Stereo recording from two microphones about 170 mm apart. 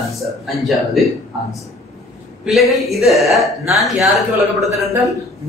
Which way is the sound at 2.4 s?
Centre (ahead or behind).